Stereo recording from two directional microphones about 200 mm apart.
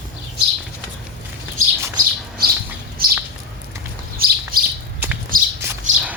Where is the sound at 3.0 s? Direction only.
45° right (ahead or behind).